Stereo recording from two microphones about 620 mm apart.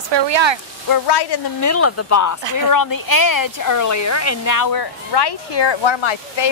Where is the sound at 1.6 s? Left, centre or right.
Left.